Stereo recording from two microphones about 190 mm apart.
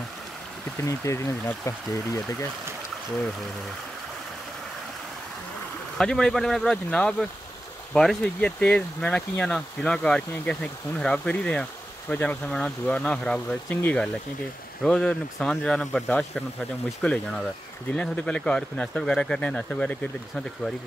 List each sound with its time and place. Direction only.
0.8 s speech: 15° left (ahead or behind)
5.9 s speech: 5° left (ahead or behind)